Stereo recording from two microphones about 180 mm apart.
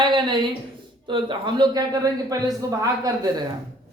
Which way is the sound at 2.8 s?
20° right (ahead or behind).